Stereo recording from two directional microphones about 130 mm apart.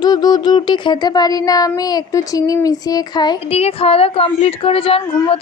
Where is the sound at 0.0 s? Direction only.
30° left (ahead or behind).